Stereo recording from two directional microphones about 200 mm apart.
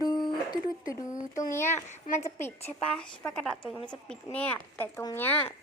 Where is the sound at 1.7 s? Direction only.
35° left (ahead or behind).